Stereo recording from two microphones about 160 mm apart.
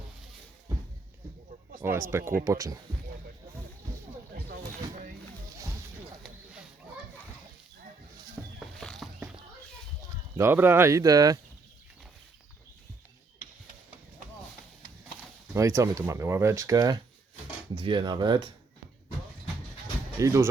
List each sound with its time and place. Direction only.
1.8 s speech: 15° right (ahead or behind)
4.4 s a sound: 70° right (ahead or behind)
6.2 s a sound: 5° right (ahead or behind)
8.5 s music: centre (ahead or behind)
10.3 s speech: 15° right (ahead or behind)
15.5 s speech: 20° right (ahead or behind)
20.1 s speech: 20° right (ahead or behind)